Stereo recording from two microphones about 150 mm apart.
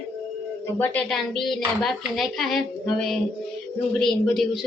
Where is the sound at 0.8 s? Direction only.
10° left (ahead or behind).